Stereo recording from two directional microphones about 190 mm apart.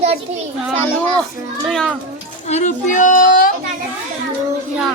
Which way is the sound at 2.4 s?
40° left (ahead or behind).